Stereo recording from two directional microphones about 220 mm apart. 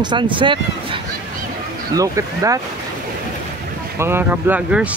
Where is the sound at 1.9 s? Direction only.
15° right (ahead or behind).